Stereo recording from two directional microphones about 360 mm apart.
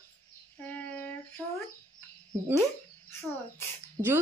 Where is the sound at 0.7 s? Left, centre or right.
Centre.